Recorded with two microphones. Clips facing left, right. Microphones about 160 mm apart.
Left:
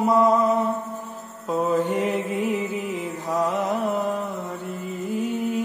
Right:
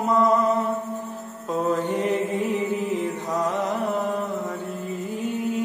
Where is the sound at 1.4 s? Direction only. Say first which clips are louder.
Left 2 dB; 5° left (ahead or behind).